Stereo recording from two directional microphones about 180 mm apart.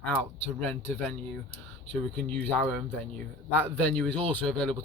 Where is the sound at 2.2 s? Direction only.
10° left (ahead or behind).